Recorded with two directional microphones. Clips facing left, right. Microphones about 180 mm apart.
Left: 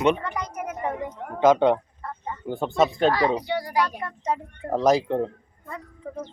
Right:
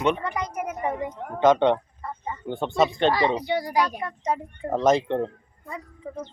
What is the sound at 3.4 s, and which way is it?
Speech, 15° right (ahead or behind).